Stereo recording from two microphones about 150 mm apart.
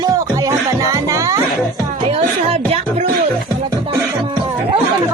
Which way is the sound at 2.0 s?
40° right (ahead or behind).